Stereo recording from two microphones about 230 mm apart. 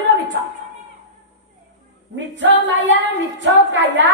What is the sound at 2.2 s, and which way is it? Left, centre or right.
A woman's voice, right.